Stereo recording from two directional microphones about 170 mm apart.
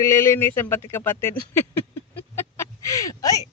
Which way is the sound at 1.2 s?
15° left (ahead or behind).